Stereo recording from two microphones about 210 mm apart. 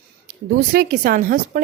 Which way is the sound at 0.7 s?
45° right (ahead or behind).